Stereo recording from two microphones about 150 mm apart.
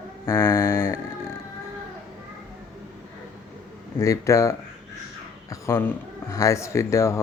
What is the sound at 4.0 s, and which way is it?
Speech, 20° left (ahead or behind).